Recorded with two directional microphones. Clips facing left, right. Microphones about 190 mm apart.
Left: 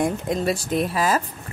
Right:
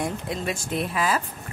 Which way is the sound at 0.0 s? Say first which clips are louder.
Left 6 dB; 45° left (ahead or behind).